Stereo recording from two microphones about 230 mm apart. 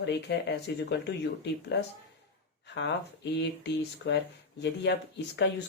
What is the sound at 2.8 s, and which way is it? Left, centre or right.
Speech, left.